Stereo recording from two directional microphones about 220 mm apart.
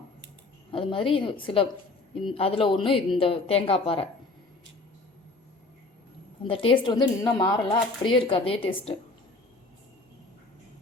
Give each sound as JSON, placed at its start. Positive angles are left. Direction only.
{"t": 0.7, "sound": "speech", "side_deg": 25}
{"t": 6.5, "sound": "speech", "side_deg": 25}